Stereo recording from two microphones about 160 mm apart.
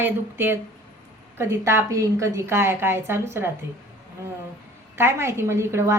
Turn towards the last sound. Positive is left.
turn(degrees=-15)  # may be behind; listen again after turning